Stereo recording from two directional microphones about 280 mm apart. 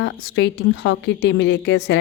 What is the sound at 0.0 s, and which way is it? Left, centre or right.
A woman's voice, left.